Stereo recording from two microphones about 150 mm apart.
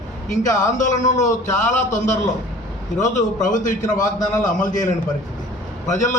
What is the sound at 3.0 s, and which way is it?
A man's voice, 60° left (ahead or behind).